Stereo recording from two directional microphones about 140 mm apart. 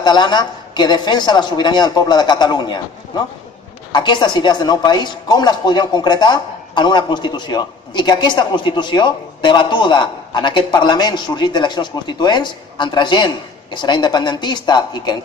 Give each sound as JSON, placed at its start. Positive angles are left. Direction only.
{"t": 0.0, "sound": "a woman's voice", "side_deg": 30}